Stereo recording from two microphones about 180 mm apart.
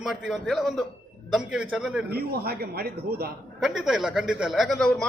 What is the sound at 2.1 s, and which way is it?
Speech, 60° right (ahead or behind).